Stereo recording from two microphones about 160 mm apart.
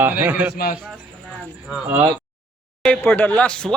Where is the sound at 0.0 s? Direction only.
10° right (ahead or behind).